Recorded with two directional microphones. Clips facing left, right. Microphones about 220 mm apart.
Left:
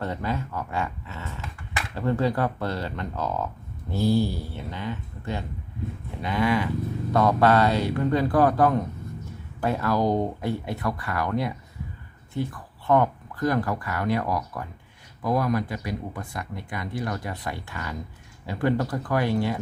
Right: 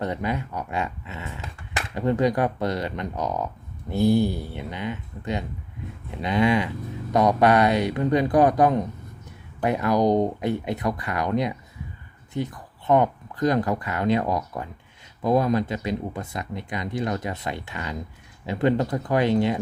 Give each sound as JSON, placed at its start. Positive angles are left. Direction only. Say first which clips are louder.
{"t": 0.0, "sound": "speech", "louder": "right 2 dB", "side_deg": -15}